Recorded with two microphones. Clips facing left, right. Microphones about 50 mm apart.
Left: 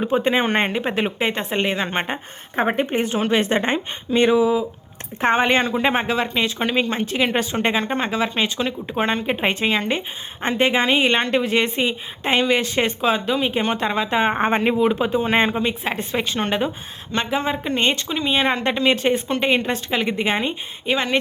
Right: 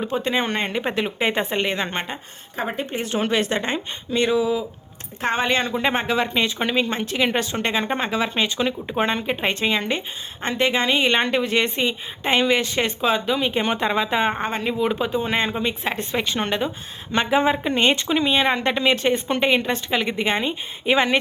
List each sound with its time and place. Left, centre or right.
0.0 s speech: centre
0.9 s speech: centre
2.6 s a woman's voice: left
5.6 s speech: centre
7.9 s speech: centre
9.2 s speech: centre
14.3 s speech: left
14.8 s speech: centre
17.3 s speech: centre
18.3 s speech: centre
20.8 s speech: centre